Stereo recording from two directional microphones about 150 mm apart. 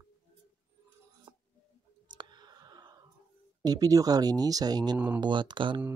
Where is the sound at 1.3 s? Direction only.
25° right (ahead or behind).